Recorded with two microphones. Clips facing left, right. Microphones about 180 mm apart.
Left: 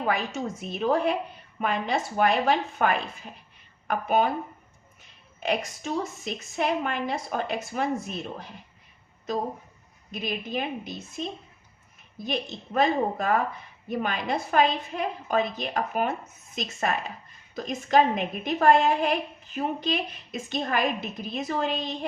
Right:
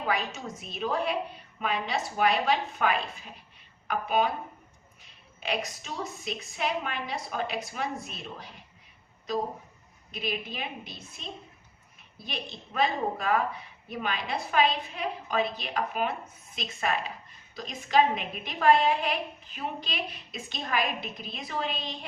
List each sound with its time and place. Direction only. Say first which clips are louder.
0.3 s a woman's voice: left 6 dB; 50° left (ahead or behind)
5.4 s a woman's voice: left 4 dB; 45° left (ahead or behind)
10.1 s a woman's voice: left 3 dB; 45° left (ahead or behind)
12.2 s a woman's voice: left 8 dB; 45° left (ahead or behind)